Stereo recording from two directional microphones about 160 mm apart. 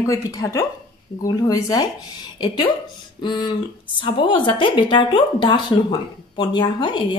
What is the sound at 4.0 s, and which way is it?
Speech, 30° left (ahead or behind).